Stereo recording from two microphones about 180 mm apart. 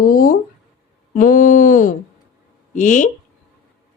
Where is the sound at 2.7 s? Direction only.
45° left (ahead or behind).